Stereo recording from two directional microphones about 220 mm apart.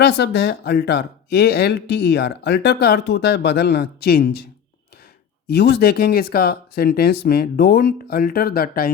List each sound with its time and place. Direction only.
0.0 s speech: 50° left (ahead or behind)
5.5 s speech: 50° left (ahead or behind)